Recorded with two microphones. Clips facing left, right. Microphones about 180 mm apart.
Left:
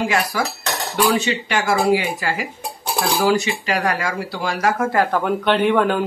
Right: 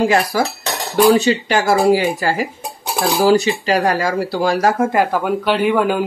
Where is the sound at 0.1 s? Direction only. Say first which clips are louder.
Right 5 dB; 35° right (ahead or behind).